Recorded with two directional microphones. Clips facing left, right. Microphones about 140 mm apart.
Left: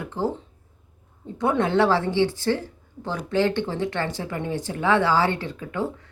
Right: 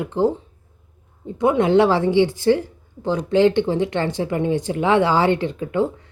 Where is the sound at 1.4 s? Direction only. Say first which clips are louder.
Right 5 dB; 15° right (ahead or behind).